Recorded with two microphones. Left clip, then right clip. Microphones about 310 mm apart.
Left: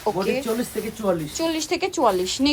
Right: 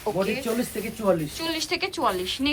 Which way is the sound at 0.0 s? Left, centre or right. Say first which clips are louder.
Left 3 dB; centre.